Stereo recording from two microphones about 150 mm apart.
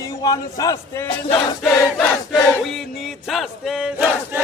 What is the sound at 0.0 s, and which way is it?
Speech, 25° left (ahead or behind).